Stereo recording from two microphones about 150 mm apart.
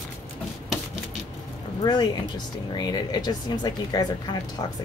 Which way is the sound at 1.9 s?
30° left (ahead or behind).